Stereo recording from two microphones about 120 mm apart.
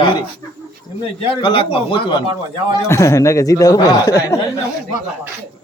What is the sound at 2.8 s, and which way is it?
Speech, 25° left (ahead or behind).